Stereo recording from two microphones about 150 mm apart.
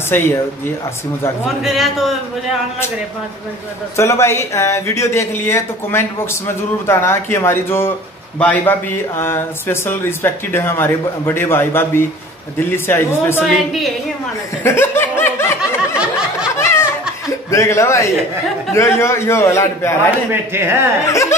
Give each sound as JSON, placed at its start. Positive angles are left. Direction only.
{"t": 0.1, "sound": "speech", "side_deg": 15}
{"t": 1.6, "sound": "a man's voice", "side_deg": 0}
{"t": 3.9, "sound": "speech", "side_deg": 20}
{"t": 14.6, "sound": "snicker", "side_deg": 15}
{"t": 16.5, "sound": "a sound", "side_deg": 20}
{"t": 17.5, "sound": "a man's voice", "side_deg": 20}
{"t": 20.5, "sound": "speech", "side_deg": -15}
{"t": 21.1, "sound": "a man's voice", "side_deg": 20}